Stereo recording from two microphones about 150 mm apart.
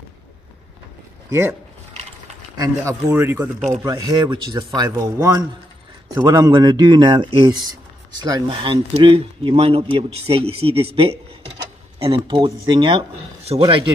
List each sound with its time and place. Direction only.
1.3 s a man's voice: 15° right (ahead or behind); by 13.8 s 35° right (ahead or behind)